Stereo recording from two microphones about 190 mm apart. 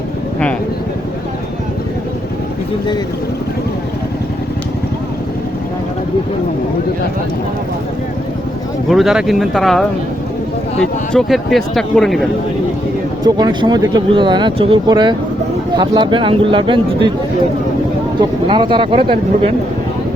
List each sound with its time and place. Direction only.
8.9 s a man's voice: centre (ahead or behind)
13.2 s speech: 20° right (ahead or behind)
18.2 s speech: 25° right (ahead or behind)